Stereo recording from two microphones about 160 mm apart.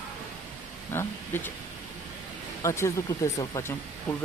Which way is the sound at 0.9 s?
15° left (ahead or behind).